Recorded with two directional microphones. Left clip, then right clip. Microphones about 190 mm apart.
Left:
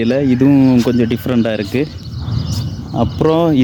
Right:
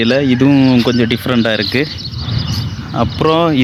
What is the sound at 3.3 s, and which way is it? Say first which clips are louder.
Speech: right 1 dB; 25° left (ahead or behind).